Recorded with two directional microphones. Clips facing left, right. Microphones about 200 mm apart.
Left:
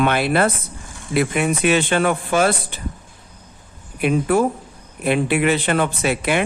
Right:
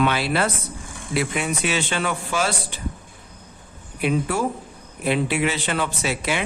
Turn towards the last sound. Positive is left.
turn(degrees=55)  # may be behind; listen again after turning